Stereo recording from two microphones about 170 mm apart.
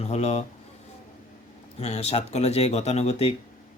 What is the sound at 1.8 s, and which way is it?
Speech, 40° left (ahead or behind).